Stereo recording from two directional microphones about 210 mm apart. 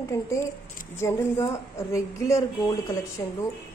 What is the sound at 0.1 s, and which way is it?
Speech, 15° left (ahead or behind).